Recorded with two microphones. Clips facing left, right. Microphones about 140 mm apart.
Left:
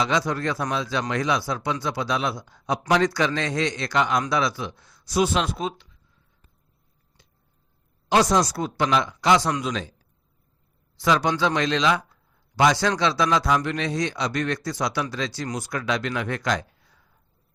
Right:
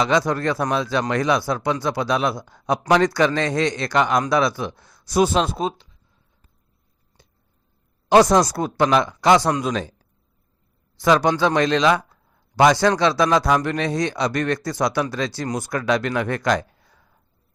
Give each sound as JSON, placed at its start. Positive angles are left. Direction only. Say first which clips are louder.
{"t": 0.0, "sound": "a man's voice", "louder": "right 4 dB", "side_deg": -50}
{"t": 8.1, "sound": "a man's voice", "louder": "right 5 dB", "side_deg": -50}
{"t": 10.9, "sound": "a man's voice", "louder": "right 4 dB", "side_deg": -45}